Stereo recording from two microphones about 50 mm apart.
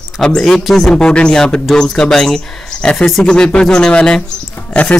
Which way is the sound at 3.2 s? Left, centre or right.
Centre.